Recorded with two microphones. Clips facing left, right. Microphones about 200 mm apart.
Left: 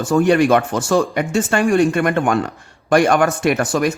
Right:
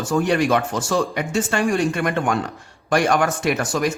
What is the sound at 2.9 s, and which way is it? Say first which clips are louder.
Speech: left 4 dB; 55° left (ahead or behind).